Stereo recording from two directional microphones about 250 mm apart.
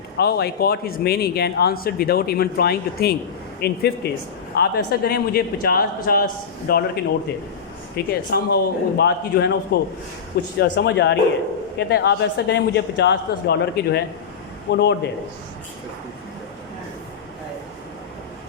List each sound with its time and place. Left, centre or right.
0.2 s a man's voice: left